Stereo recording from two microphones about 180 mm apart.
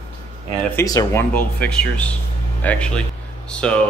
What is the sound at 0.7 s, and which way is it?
Speech, 15° left (ahead or behind).